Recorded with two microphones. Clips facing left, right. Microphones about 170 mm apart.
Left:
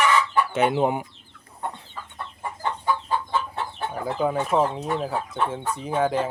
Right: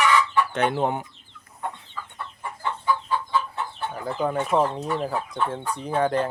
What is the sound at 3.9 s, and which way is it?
Speech, 10° left (ahead or behind).